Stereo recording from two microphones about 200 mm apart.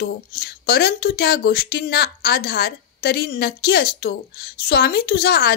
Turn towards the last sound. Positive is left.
turn(degrees=55)  # may be behind; listen again after turning